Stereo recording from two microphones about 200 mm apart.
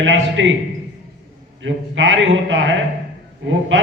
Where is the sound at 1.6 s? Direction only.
70° right (ahead or behind).